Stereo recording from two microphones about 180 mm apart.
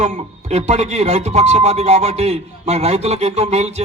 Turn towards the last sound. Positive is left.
turn(degrees=-35)  # may be behind; listen again after turning